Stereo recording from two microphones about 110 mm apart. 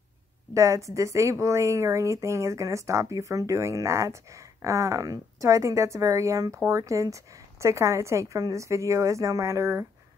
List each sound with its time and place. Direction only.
0.6 s speech: 30° right (ahead or behind)